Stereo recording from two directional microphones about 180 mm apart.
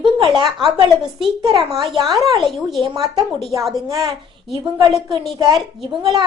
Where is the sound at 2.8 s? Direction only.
25° right (ahead or behind).